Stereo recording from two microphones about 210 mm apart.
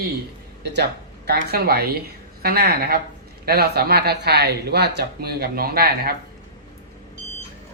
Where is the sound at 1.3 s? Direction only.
50° right (ahead or behind).